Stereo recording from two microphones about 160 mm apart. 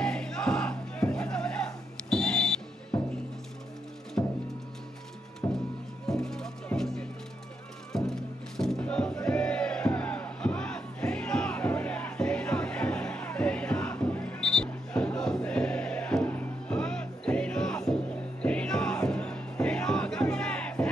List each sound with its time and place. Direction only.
0.0 s music: 5° left (ahead or behind)
4.2 s music: 20° left (ahead or behind)
5.4 s music: 20° left (ahead or behind)
6.0 s music: 5° left (ahead or behind)
8.1 s music: 5° left (ahead or behind)